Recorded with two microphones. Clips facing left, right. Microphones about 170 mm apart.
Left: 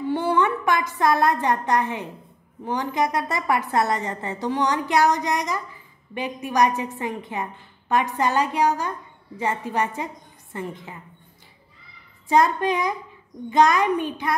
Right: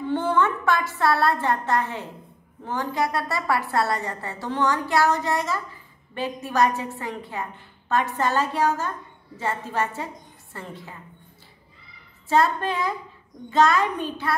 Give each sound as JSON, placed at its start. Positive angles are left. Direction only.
{"t": 0.1, "sound": "a woman's voice", "side_deg": 10}
{"t": 12.3, "sound": "a woman's voice", "side_deg": 15}